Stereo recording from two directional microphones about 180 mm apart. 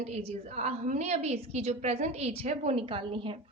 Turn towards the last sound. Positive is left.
turn(degrees=-30)  # may be behind; listen again after turning